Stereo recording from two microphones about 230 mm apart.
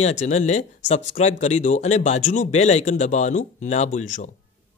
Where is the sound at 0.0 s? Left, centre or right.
Left.